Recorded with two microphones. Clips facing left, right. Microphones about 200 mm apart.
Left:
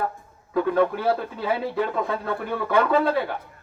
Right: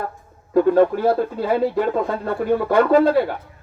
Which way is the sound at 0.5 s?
45° right (ahead or behind).